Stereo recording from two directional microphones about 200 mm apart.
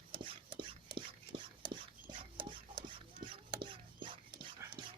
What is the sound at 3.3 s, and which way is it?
Whispering, 25° right (ahead or behind).